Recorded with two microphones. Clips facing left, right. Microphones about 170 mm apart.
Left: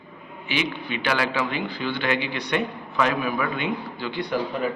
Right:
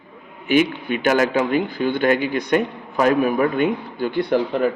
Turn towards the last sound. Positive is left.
turn(degrees=-55)  # may be behind; listen again after turning